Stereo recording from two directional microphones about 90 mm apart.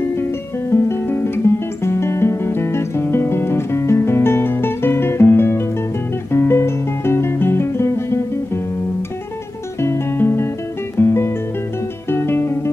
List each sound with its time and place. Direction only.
0.0 s music: 30° left (ahead or behind)
9.8 s music: 25° left (ahead or behind)